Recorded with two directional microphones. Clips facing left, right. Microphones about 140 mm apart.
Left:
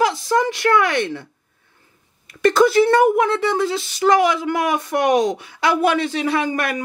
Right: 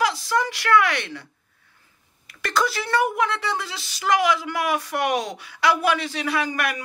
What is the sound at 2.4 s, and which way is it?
Speech, 25° left (ahead or behind).